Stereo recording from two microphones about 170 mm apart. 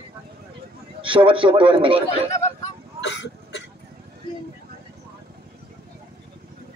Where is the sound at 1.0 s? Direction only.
30° right (ahead or behind).